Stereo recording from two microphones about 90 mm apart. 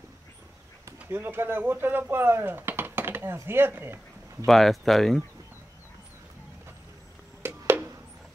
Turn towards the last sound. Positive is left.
turn(degrees=-25)  # may be behind; listen again after turning